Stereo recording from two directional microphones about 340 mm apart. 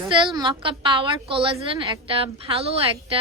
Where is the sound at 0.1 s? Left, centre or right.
Centre.